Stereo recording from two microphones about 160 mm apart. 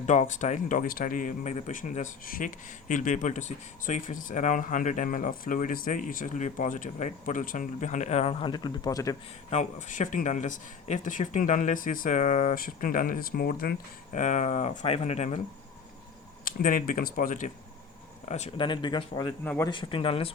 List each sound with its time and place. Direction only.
0.0 s speech: 50° left (ahead or behind); by 9.1 s 20° left (ahead or behind)
9.5 s speech: 45° left (ahead or behind)
16.5 s speech: 60° left (ahead or behind)
18.3 s speech: 45° left (ahead or behind)